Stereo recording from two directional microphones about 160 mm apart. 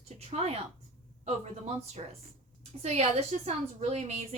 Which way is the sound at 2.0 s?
40° right (ahead or behind).